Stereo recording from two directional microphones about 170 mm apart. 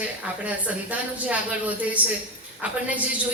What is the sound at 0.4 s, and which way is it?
A woman's voice, 10° right (ahead or behind).